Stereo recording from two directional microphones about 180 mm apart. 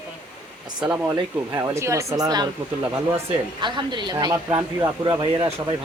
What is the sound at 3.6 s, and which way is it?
Speech, 25° right (ahead or behind).